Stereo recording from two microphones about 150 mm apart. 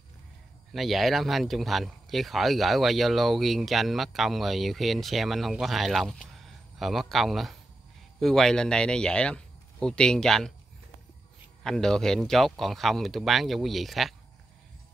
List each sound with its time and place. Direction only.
0.7 s speech: centre (ahead or behind)
11.6 s speech: 5° left (ahead or behind)